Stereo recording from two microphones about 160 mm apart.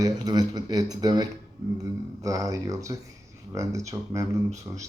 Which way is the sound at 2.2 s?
20° right (ahead or behind).